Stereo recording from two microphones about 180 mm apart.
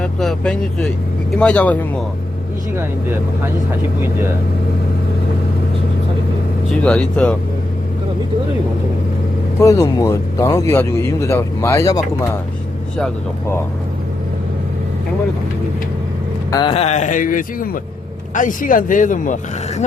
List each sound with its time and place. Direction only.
0.0 s speech: 5° left (ahead or behind)
2.7 s speech: 15° right (ahead or behind)
6.7 s speech: 5° left (ahead or behind)
9.6 s speech: 20° left (ahead or behind)
16.6 s speech: 35° left (ahead or behind)